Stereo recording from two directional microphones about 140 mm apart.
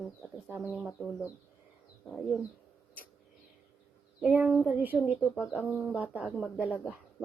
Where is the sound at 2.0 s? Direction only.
5° left (ahead or behind).